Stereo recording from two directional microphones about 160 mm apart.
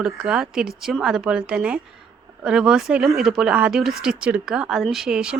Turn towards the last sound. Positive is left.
turn(degrees=-5)  # may be behind; listen again after turning